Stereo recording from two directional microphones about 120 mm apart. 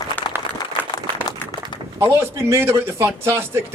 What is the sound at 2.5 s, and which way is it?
Speech, 20° right (ahead or behind).